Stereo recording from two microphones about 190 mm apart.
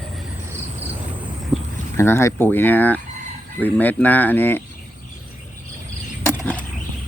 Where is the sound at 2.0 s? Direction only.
15° left (ahead or behind).